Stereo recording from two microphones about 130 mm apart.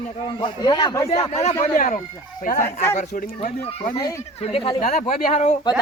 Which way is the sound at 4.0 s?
25° left (ahead or behind).